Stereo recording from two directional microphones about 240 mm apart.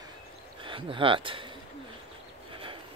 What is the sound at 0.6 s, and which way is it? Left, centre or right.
Speech, right.